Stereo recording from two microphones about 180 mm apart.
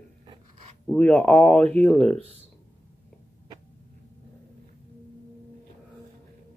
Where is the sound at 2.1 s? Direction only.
35° right (ahead or behind).